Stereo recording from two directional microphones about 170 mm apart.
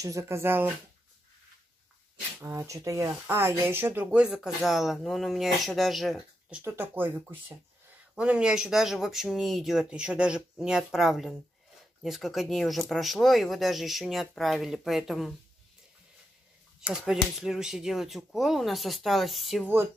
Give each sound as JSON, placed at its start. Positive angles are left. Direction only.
{"t": 0.0, "sound": "speech", "side_deg": -15}
{"t": 2.4, "sound": "speech", "side_deg": -20}
{"t": 16.8, "sound": "speech", "side_deg": 0}